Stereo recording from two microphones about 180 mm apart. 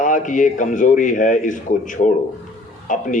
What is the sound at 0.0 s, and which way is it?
A man's voice, 45° left (ahead or behind).